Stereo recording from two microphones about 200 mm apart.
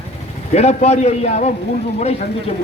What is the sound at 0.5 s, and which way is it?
Speech, 30° left (ahead or behind).